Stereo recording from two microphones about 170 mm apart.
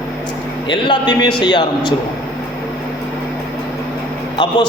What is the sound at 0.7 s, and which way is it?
A man's voice, 25° left (ahead or behind).